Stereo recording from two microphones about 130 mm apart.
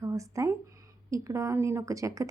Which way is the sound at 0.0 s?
25° right (ahead or behind).